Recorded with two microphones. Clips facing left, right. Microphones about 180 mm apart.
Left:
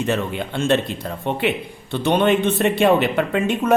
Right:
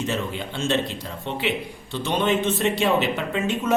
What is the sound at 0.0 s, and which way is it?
A man's voice, 60° left (ahead or behind).